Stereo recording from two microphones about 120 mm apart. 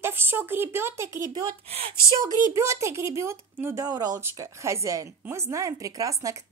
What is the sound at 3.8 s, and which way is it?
Speech, 35° right (ahead or behind).